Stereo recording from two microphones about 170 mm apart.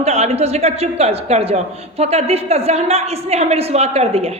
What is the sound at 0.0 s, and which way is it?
A man's voice, 40° right (ahead or behind).